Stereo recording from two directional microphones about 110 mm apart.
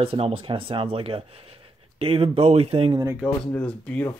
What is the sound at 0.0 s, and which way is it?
Speech, 55° right (ahead or behind).